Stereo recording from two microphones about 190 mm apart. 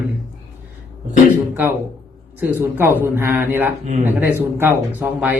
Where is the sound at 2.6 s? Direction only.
10° right (ahead or behind).